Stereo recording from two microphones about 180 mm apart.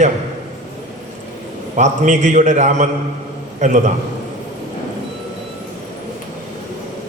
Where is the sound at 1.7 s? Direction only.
40° right (ahead or behind).